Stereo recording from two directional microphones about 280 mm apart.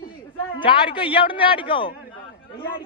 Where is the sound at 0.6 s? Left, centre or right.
Centre.